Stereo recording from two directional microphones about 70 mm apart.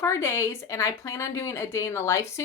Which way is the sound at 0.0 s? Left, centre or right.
Left.